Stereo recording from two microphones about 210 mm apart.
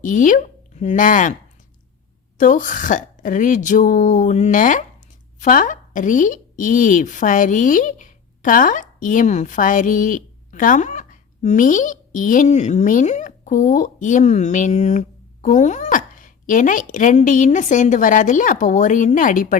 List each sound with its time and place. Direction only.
0.0 s speech: 35° left (ahead or behind)
2.4 s speech: 40° left (ahead or behind)